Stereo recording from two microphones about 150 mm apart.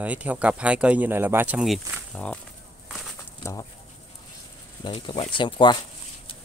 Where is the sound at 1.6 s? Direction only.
5° left (ahead or behind).